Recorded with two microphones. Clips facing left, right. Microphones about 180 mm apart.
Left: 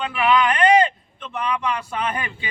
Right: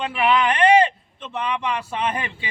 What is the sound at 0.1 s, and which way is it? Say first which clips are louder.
A man's voice: left 1 dB; 25° right (ahead or behind).